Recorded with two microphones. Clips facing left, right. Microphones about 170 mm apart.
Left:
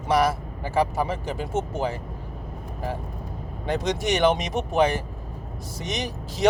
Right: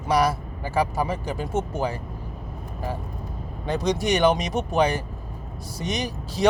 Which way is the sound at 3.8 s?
20° left (ahead or behind).